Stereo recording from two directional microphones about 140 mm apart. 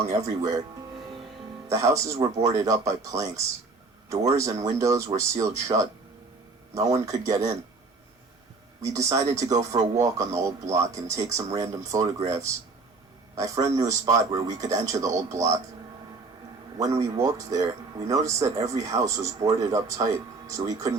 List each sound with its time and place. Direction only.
0.0 s speech: 20° right (ahead or behind)
1.7 s speech: 20° right (ahead or behind)
8.8 s speech: 20° right (ahead or behind)
13.3 s speech: 20° right (ahead or behind)
16.7 s speech: 20° right (ahead or behind)